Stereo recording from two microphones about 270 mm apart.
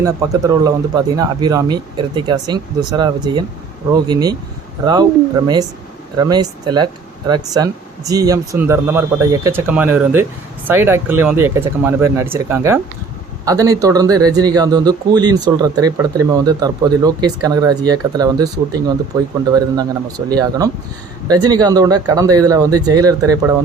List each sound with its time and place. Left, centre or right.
0.0 s speech: centre
6.1 s speech: centre
19.5 s speech: centre